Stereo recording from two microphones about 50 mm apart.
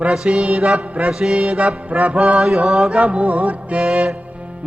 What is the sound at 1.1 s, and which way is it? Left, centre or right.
Music, centre.